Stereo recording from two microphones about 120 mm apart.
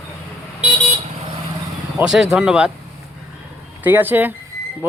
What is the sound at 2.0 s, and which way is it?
Speech, 5° right (ahead or behind).